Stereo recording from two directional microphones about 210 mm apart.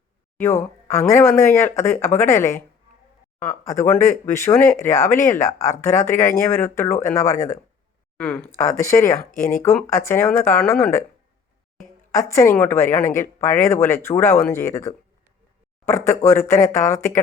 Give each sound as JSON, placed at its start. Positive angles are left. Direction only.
{"t": 0.4, "sound": "speech", "side_deg": 15}
{"t": 12.1, "sound": "speech", "side_deg": 15}